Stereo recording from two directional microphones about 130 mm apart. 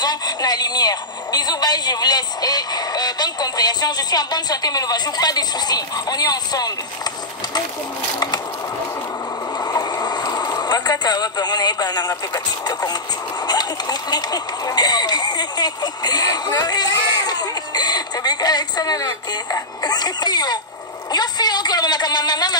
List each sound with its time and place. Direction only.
0.0 s speech: 30° left (ahead or behind)
9.7 s a sound: 30° left (ahead or behind)
13.5 s speech: 30° left (ahead or behind)